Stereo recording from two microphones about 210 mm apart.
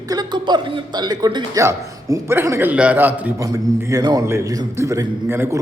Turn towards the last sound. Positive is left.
turn(degrees=-10)  # may be behind; listen again after turning